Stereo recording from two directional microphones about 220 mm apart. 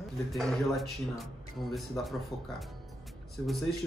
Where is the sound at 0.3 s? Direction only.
Centre (ahead or behind).